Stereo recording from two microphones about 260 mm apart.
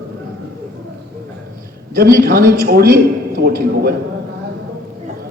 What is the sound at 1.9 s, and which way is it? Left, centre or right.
A man's voice, right.